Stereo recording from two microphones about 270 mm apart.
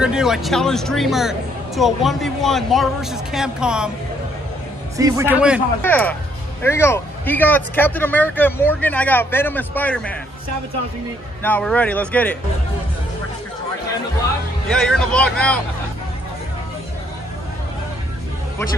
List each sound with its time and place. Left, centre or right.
0.0 s speech: centre
4.9 s a man's voice: centre
5.8 s speech: centre
11.4 s speech: centre
14.7 s speech: centre